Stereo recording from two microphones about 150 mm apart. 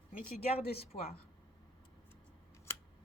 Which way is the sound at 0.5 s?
45° left (ahead or behind).